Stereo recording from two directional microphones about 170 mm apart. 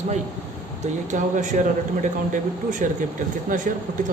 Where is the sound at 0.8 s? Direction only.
45° right (ahead or behind).